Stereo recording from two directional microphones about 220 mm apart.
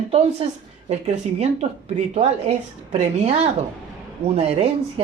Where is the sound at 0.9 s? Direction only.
30° right (ahead or behind).